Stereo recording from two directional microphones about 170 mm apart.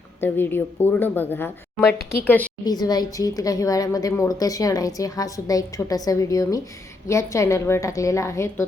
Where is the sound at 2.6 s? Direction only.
25° left (ahead or behind).